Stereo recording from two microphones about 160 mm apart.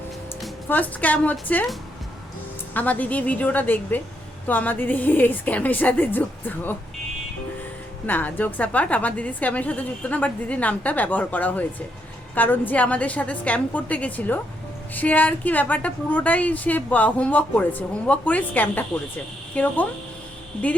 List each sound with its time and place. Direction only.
0.7 s a woman's voice: 10° left (ahead or behind)
2.7 s a woman's voice: 10° left (ahead or behind)
8.0 s a woman's voice: 10° left (ahead or behind)